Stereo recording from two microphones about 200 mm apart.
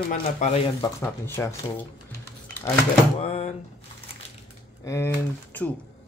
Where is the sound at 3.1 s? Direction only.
30° left (ahead or behind).